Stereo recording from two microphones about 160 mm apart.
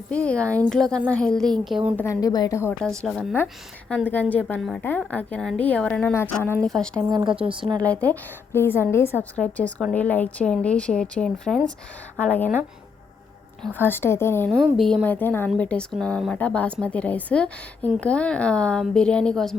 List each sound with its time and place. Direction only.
0.1 s a woman's voice: 5° left (ahead or behind)
2.0 s a woman's voice: 20° left (ahead or behind)
3.1 s a woman's voice: centre (ahead or behind)
7.1 s a woman's voice: 25° right (ahead or behind)
7.9 s a woman's voice: 10° left (ahead or behind)
13.7 s a woman's voice: 15° left (ahead or behind)
14.6 s a woman's voice: centre (ahead or behind)